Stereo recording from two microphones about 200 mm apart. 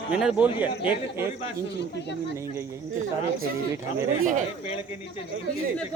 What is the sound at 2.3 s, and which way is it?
Speech, 15° right (ahead or behind).